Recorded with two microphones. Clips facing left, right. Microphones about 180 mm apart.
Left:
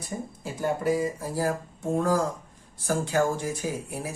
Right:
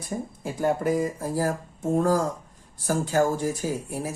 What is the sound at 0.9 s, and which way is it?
Speech, 45° right (ahead or behind).